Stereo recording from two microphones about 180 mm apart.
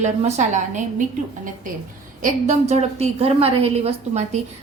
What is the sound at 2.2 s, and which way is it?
A woman's voice, 45° right (ahead or behind).